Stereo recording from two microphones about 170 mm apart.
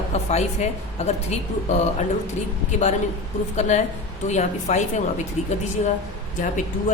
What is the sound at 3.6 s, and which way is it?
A woman's voice, 45° left (ahead or behind).